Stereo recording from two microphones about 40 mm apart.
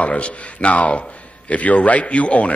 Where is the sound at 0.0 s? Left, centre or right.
Left.